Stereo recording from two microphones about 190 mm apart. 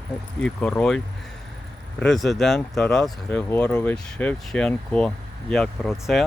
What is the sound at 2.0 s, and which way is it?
Speech, centre (ahead or behind).